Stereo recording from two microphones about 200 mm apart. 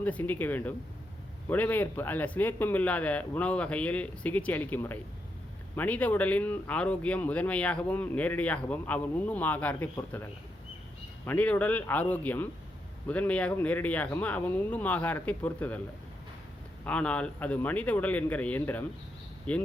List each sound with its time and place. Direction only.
0.0 s speech: 10° left (ahead or behind)
11.3 s speech: 10° left (ahead or behind)
16.8 s speech: 5° left (ahead or behind)